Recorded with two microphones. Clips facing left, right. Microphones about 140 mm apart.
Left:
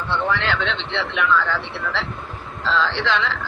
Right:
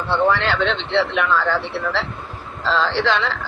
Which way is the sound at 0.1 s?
35° right (ahead or behind).